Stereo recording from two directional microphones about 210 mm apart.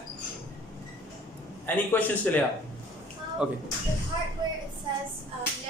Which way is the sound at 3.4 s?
5° right (ahead or behind).